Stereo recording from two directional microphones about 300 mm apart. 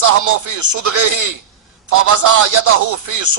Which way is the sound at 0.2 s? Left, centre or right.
Right.